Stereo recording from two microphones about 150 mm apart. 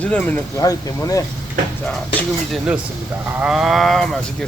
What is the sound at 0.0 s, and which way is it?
Speech, 10° left (ahead or behind).